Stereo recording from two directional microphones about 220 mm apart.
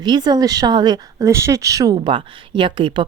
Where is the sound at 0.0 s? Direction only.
20° right (ahead or behind).